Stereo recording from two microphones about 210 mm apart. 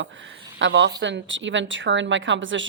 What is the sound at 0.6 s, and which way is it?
Speech, 60° right (ahead or behind).